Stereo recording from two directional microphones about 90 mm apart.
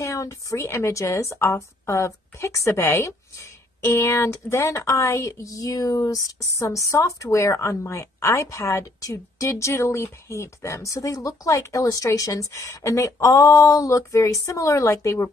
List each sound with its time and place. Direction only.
0.0 s a woman's voice: 35° left (ahead or behind)